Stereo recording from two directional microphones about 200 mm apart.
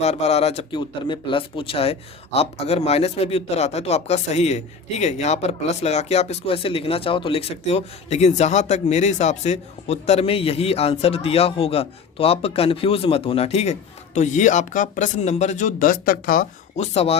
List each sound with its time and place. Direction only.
0.0 s speech: 35° left (ahead or behind)